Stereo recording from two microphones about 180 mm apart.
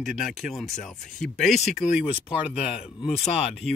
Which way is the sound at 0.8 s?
45° left (ahead or behind).